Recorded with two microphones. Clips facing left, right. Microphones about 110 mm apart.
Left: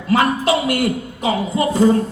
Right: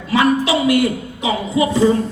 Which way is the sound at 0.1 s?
50° left (ahead or behind).